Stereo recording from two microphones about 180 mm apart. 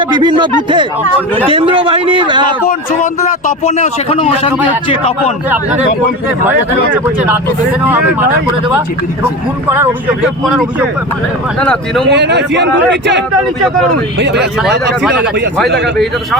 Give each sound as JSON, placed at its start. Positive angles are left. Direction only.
{"t": 0.0, "sound": "a man's voice", "side_deg": -25}
{"t": 2.6, "sound": "a man's voice", "side_deg": 45}
{"t": 6.9, "sound": "speech", "side_deg": -10}
{"t": 9.6, "sound": "speech", "side_deg": -10}
{"t": 12.0, "sound": "speech", "side_deg": -70}